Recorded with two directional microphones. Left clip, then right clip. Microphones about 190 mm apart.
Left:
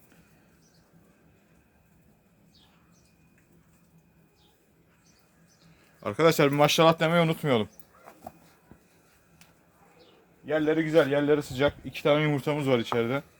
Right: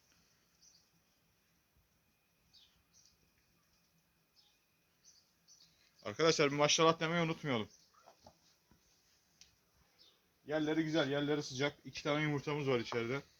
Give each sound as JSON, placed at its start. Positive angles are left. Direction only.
{"t": 6.0, "sound": "speech", "side_deg": 70}
{"t": 10.5, "sound": "a man's voice", "side_deg": 30}